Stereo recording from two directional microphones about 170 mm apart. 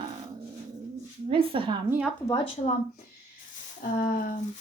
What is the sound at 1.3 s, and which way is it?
Speech, 30° right (ahead or behind).